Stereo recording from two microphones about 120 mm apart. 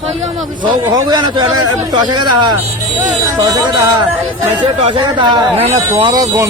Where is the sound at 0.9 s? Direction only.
35° right (ahead or behind).